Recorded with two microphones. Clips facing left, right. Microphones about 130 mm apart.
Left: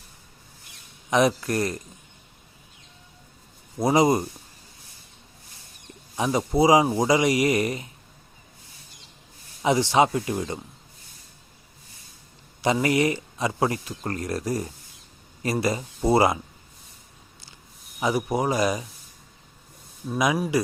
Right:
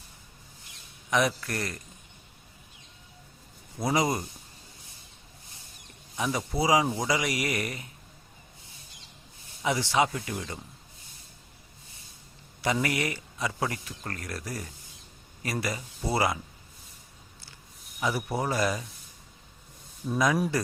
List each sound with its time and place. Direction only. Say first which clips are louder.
1.3 s speech: left 8 dB; 25° left (ahead or behind)
3.8 s speech: left 7 dB; 25° left (ahead or behind)
6.1 s speech: left 7 dB; 25° left (ahead or behind)
9.6 s speech: left 6 dB; 25° left (ahead or behind)
12.6 s speech: left 7 dB; 25° left (ahead or behind)
18.0 s speech: left 5 dB; 20° left (ahead or behind)
20.1 s speech: left 2 dB; 10° left (ahead or behind)